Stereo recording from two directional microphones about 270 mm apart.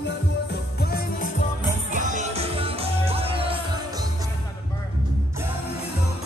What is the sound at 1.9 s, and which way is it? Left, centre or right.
Music, right.